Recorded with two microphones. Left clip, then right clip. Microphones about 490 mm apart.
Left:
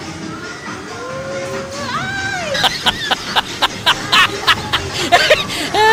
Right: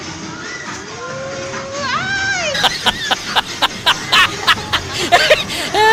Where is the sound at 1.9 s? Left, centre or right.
Right.